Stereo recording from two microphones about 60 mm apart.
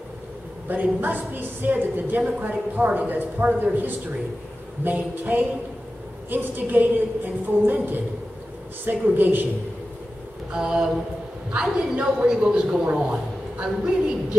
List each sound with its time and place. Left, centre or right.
0.7 s a woman's voice: right
10.5 s a woman's voice: centre